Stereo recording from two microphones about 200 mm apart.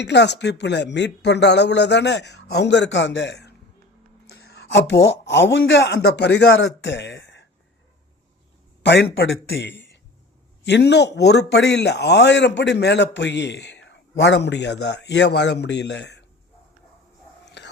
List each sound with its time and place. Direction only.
0.0 s a man's voice: 60° left (ahead or behind)
8.8 s a man's voice: 60° left (ahead or behind)
17.4 s whispering: 60° left (ahead or behind)